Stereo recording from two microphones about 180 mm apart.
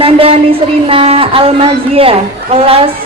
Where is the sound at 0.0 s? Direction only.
30° right (ahead or behind).